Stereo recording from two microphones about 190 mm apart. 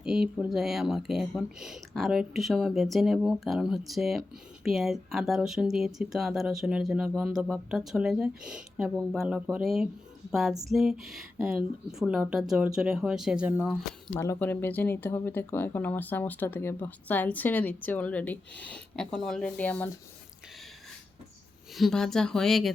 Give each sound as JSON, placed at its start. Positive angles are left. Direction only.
{"t": 0.0, "sound": "speech", "side_deg": -5}
{"t": 14.1, "sound": "speech", "side_deg": 10}
{"t": 21.8, "sound": "speech", "side_deg": 0}